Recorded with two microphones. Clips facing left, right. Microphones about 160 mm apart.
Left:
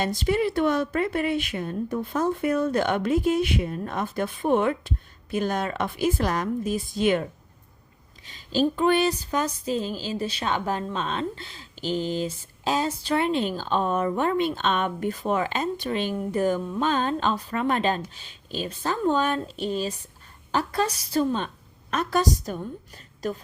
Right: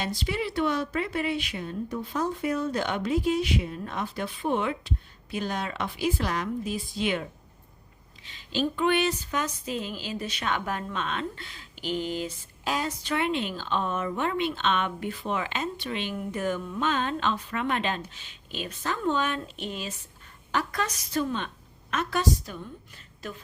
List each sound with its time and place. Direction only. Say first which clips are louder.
0.0 s speech: left 7 dB; 45° left (ahead or behind)